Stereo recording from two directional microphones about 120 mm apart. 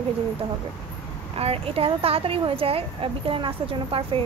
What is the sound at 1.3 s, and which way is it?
Speech, 55° right (ahead or behind).